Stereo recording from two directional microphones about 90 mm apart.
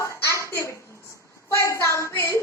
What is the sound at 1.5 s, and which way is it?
Child singing, 30° left (ahead or behind).